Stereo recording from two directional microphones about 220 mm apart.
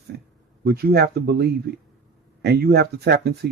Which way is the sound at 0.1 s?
50° right (ahead or behind).